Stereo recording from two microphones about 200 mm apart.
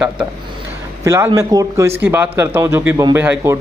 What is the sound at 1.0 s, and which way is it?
Speech, 15° right (ahead or behind).